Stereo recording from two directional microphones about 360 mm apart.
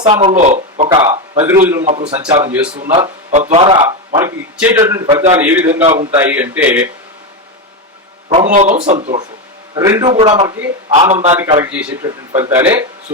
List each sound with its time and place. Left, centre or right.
0.0 s speech: centre
1.8 s speech: centre
2.4 s speech: centre
2.7 s speech: centre
8.3 s a man's voice: centre